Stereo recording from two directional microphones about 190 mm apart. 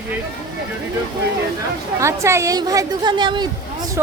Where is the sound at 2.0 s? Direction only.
15° right (ahead or behind).